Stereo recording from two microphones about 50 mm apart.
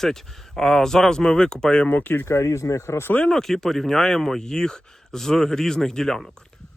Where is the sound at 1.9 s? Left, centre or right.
Left.